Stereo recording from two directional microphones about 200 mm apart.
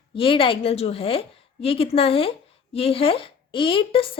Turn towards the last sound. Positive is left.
turn(degrees=25)  # may be behind; listen again after turning